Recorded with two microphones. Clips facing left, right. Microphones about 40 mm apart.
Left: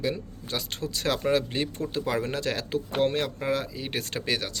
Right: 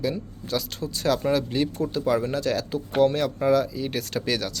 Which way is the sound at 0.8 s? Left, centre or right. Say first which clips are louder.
Right 3 dB; left.